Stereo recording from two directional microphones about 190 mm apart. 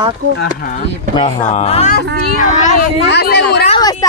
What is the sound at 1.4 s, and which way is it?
Speech, 35° left (ahead or behind).